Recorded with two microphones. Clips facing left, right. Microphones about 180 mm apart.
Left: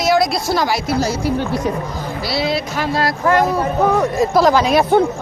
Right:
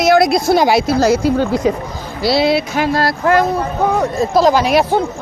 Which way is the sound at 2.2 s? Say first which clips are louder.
Right 7 dB; 70° right (ahead or behind).